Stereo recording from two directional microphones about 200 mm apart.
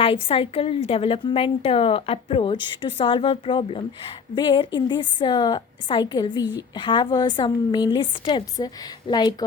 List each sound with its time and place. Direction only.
0.0 s a woman's voice: 25° left (ahead or behind)